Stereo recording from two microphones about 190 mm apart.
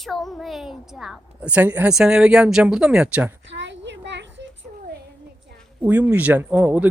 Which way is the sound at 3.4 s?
70° right (ahead or behind).